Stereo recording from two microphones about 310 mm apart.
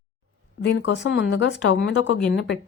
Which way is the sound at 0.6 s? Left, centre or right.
Left.